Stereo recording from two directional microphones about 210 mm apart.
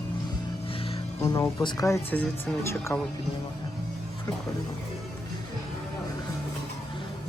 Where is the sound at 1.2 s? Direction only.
15° left (ahead or behind).